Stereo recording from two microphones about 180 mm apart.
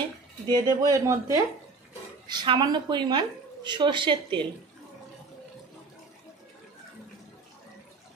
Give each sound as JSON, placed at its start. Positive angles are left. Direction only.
{"t": 0.5, "sound": "a woman's voice", "side_deg": -20}